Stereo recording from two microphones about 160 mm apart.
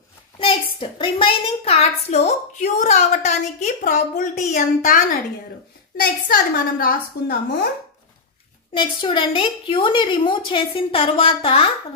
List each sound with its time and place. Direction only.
0.4 s a woman's voice: 35° left (ahead or behind); by 5.0 s 55° left (ahead or behind)
6.2 s a woman's voice: 70° left (ahead or behind)
8.7 s a woman's voice: 30° left (ahead or behind)